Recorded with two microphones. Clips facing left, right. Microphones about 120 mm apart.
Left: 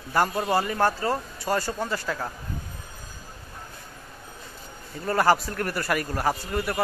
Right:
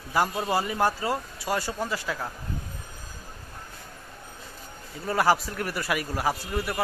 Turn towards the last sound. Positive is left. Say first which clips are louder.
# left 2 dB
turn(degrees=-5)  # may be behind; listen again after turning